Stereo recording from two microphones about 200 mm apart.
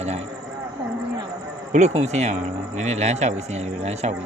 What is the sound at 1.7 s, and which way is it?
Speech, 35° right (ahead or behind).